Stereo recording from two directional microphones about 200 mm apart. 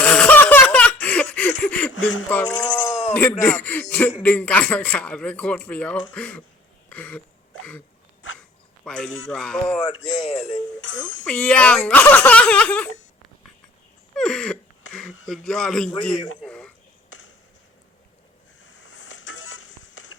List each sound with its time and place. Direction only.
0.0 s laughter: 5° left (ahead or behind)
1.9 s a sound: 80° left
2.3 s speech: 5° left (ahead or behind)
6.9 s a sound: 5° left (ahead or behind)
8.8 s a man's voice: 5° left (ahead or behind)
10.1 s speech: 35° left (ahead or behind)
10.8 s speech: 70° left (ahead or behind)
11.3 s speech: 5° left (ahead or behind)
14.2 s a sound: 5° left (ahead or behind)
15.3 s a man's voice: 5° left (ahead or behind)
18.8 s vehicle: 75° left (ahead or behind)